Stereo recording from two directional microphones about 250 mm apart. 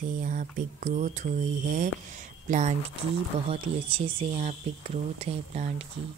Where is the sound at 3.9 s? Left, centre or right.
Right.